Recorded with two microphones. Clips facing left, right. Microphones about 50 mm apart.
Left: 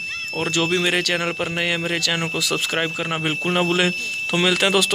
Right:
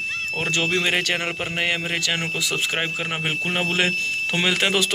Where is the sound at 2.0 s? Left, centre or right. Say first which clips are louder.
Left 1 dB; right.